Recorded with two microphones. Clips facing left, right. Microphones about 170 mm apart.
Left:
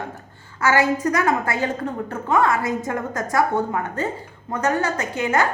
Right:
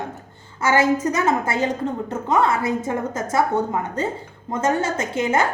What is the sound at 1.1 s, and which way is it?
A woman's voice, 20° right (ahead or behind).